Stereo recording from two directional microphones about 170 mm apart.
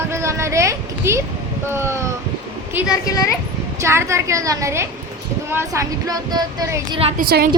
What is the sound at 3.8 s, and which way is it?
Speech, 15° right (ahead or behind).